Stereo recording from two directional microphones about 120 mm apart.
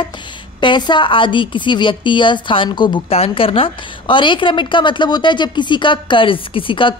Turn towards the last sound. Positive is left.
turn(degrees=45)  # may be behind; listen again after turning